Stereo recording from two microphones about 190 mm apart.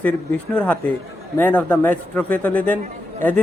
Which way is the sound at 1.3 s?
10° left (ahead or behind).